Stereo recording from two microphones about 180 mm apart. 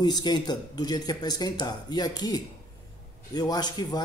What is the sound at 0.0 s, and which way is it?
Speech, 25° left (ahead or behind).